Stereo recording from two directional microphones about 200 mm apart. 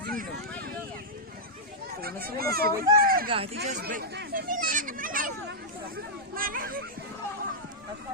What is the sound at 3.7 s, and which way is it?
Speech, 50° right (ahead or behind).